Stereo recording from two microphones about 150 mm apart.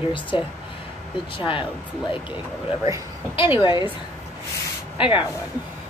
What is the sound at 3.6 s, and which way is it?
Speech, 30° left (ahead or behind).